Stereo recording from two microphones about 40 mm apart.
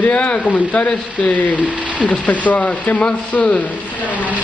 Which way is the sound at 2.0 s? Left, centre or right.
Left.